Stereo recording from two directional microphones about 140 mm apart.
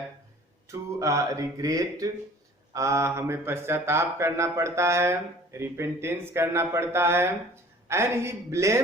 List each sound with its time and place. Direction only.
0.7 s speech: 20° right (ahead or behind)